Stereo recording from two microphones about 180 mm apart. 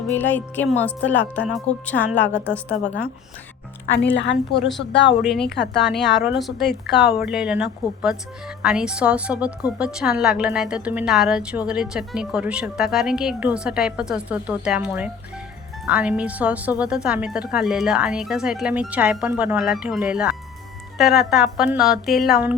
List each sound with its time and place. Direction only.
0.1 s speech: 10° left (ahead or behind)
3.8 s a woman's voice: 90° left
5.2 s a woman's voice: centre (ahead or behind)